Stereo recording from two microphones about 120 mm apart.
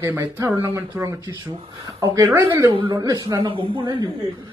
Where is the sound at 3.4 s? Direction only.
45° right (ahead or behind).